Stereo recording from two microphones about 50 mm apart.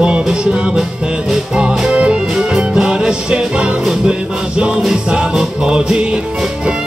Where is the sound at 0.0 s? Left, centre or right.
Centre.